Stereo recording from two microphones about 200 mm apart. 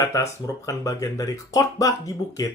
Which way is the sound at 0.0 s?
15° left (ahead or behind).